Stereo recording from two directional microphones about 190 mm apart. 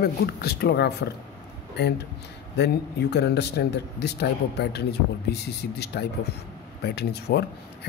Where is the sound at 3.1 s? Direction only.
60° left (ahead or behind).